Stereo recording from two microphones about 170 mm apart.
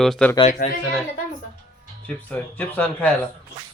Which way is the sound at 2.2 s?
10° left (ahead or behind).